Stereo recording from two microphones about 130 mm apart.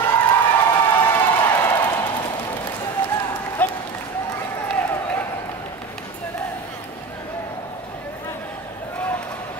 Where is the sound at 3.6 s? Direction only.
10° left (ahead or behind).